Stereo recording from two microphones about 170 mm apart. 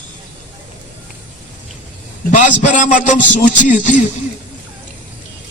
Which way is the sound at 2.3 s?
45° left (ahead or behind).